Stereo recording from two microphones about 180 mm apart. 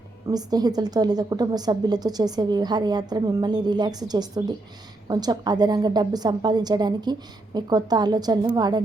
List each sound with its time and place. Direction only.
0.3 s a woman's voice: 20° right (ahead or behind)